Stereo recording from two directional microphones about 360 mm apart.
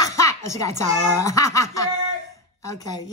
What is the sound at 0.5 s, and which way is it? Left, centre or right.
A woman's voice, centre.